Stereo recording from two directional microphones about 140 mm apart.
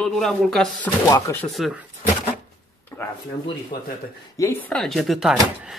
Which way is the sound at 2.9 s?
10° left (ahead or behind).